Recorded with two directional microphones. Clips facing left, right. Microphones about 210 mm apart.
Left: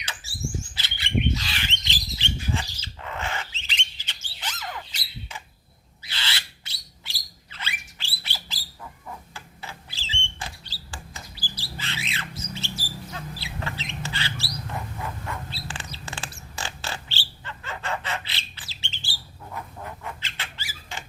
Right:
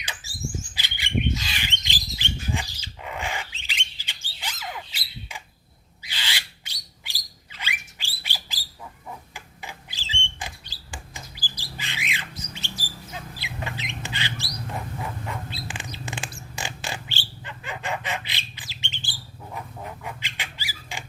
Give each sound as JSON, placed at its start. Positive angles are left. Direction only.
{"t": 0.8, "sound": "bird flight", "side_deg": -15}
{"t": 1.8, "sound": "bird", "side_deg": -15}
{"t": 9.3, "sound": "rodents", "side_deg": -15}
{"t": 11.5, "sound": "squawk", "side_deg": -15}
{"t": 15.0, "sound": "bird", "side_deg": -15}
{"t": 19.5, "sound": "a sound", "side_deg": -15}